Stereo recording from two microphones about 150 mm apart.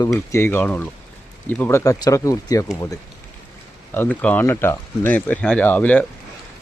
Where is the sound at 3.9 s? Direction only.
10° left (ahead or behind).